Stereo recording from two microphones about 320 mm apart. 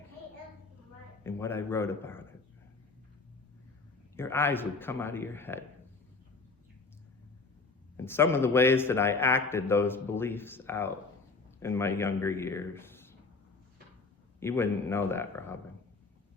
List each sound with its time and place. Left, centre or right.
1.2 s a man's voice: centre
4.2 s a man's voice: centre
7.9 s a man's voice: centre
14.3 s a man's voice: centre